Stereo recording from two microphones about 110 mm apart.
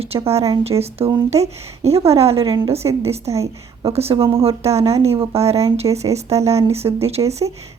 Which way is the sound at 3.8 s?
65° right (ahead or behind).